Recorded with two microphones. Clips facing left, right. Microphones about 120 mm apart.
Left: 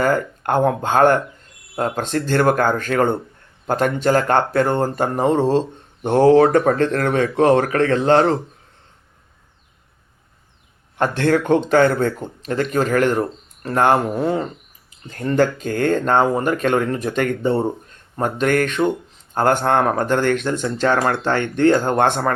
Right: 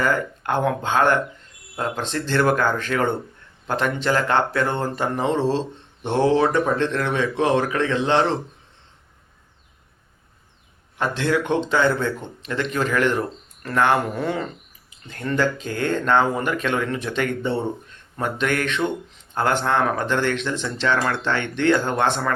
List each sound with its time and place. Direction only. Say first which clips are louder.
0.0 s speech: left 4 dB; 45° left (ahead or behind)
10.9 s speech: left 4 dB; 50° left (ahead or behind)
13.6 s speech: left 3 dB; 30° left (ahead or behind); by 22.3 s 50° left (ahead or behind)